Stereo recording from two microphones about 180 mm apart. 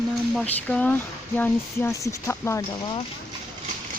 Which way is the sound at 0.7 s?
10° left (ahead or behind).